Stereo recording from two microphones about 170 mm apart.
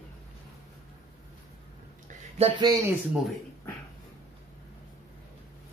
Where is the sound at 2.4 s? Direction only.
35° right (ahead or behind).